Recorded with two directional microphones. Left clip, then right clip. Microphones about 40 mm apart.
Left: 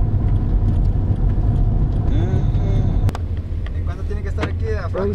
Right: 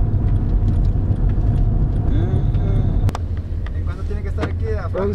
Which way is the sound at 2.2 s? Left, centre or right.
Right.